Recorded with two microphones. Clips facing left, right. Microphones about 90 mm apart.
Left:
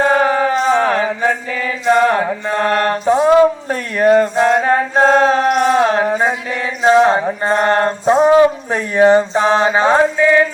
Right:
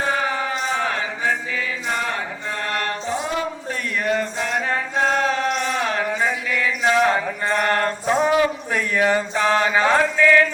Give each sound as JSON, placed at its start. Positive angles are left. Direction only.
{"t": 0.1, "sound": "chant", "side_deg": 55}
{"t": 3.7, "sound": "mantra", "side_deg": 45}
{"t": 5.5, "sound": "a sound", "side_deg": 50}